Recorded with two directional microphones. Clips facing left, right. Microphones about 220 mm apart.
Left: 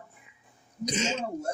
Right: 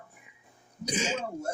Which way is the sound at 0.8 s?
10° right (ahead or behind).